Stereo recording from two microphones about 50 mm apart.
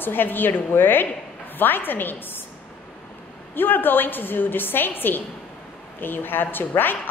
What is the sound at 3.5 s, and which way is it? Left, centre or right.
A woman's voice, left.